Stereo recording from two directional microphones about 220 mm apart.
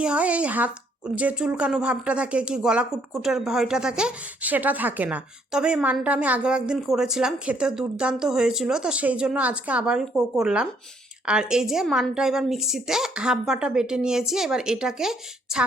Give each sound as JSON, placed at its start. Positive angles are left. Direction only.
{"t": 0.0, "sound": "speech", "side_deg": -5}